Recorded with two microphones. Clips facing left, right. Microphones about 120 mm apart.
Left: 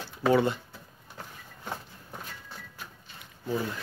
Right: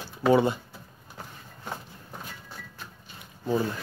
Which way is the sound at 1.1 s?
10° right (ahead or behind).